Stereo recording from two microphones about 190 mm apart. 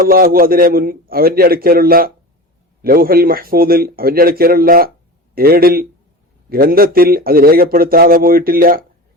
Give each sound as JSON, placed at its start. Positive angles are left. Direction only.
{"t": 0.0, "sound": "a man's voice", "side_deg": -50}